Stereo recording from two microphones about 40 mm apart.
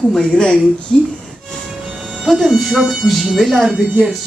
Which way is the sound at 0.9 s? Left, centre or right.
Centre.